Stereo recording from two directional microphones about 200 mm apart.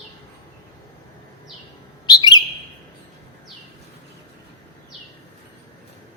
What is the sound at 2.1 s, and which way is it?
Bird, 20° left (ahead or behind).